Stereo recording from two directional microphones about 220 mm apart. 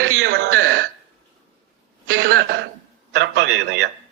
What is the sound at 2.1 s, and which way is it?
A man's voice, 45° right (ahead or behind).